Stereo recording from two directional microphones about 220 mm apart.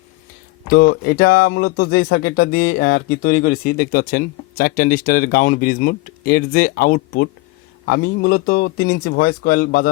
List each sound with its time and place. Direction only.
0.7 s a man's voice: 40° left (ahead or behind)